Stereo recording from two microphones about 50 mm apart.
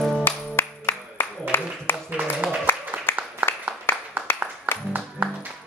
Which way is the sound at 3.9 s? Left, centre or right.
Left.